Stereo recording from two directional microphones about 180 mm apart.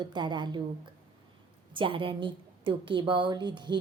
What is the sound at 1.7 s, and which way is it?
A woman's voice, 30° right (ahead or behind).